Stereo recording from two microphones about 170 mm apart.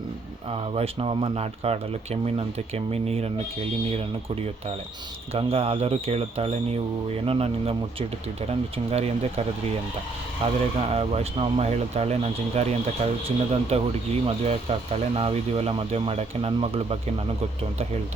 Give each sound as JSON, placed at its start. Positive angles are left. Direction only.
{"t": 0.5, "sound": "speech", "side_deg": -35}
{"t": 5.3, "sound": "speech", "side_deg": -35}
{"t": 10.4, "sound": "speech", "side_deg": -35}